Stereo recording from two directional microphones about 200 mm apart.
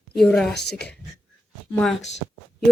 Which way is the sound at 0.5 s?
55° left (ahead or behind).